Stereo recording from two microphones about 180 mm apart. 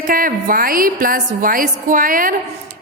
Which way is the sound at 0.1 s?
50° right (ahead or behind).